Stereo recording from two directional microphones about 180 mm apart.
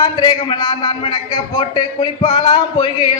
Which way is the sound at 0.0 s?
25° left (ahead or behind).